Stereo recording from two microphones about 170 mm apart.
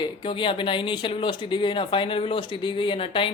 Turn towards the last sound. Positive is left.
turn(degrees=30)  # may be behind; listen again after turning